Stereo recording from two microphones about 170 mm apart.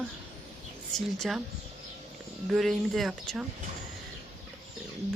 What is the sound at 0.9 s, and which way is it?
Speech, centre (ahead or behind).